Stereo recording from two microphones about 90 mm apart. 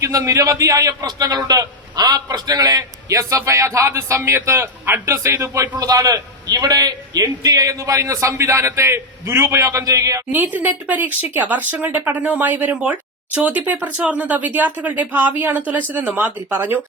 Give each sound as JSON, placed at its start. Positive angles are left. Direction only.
{"t": 0.0, "sound": "a man's voice", "side_deg": -35}
{"t": 10.3, "sound": "speech", "side_deg": -20}